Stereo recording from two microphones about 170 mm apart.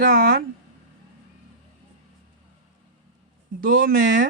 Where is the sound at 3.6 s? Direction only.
55° right (ahead or behind).